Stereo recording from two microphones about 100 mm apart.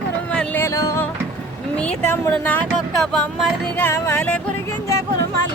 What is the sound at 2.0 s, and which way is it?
Speech, 20° left (ahead or behind).